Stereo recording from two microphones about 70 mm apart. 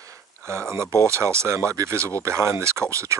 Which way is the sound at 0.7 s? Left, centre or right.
Right.